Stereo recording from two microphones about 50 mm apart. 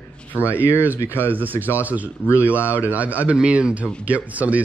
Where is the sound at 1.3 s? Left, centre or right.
Right.